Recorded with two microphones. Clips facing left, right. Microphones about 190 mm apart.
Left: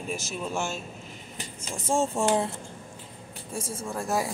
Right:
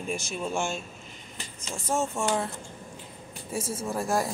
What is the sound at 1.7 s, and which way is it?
Speech, 25° left (ahead or behind).